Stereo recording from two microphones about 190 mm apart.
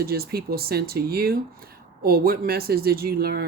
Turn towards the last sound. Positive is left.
turn(degrees=-55)  # may be behind; listen again after turning